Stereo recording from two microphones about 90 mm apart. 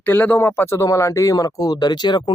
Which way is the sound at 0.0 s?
20° left (ahead or behind).